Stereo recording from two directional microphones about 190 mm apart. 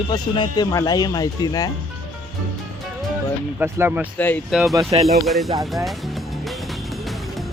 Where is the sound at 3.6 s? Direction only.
10° right (ahead or behind).